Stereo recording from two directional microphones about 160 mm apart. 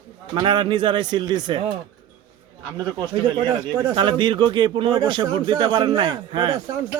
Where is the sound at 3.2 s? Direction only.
25° right (ahead or behind).